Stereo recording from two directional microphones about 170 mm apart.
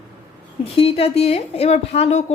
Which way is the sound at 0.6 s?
35° left (ahead or behind).